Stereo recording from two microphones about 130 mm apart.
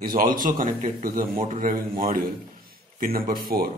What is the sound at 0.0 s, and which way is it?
A man's voice, 90° right.